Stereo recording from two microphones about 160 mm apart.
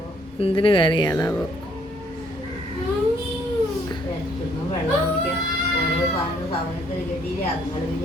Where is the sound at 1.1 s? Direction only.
15° left (ahead or behind).